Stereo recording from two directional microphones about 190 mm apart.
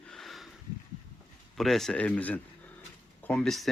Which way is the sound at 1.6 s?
Centre (ahead or behind).